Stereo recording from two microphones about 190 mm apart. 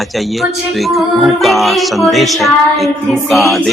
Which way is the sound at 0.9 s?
Centre (ahead or behind).